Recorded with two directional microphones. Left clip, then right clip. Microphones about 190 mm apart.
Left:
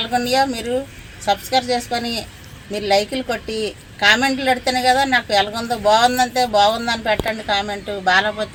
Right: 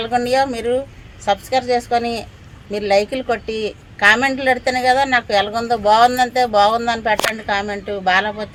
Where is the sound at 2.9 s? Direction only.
30° right (ahead or behind).